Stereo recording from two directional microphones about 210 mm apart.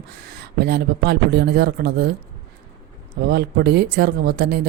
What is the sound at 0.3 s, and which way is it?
Speech, 50° right (ahead or behind).